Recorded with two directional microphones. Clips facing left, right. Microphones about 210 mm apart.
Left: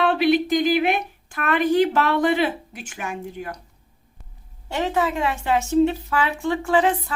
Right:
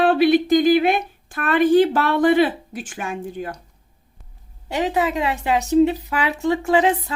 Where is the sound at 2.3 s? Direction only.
35° right (ahead or behind).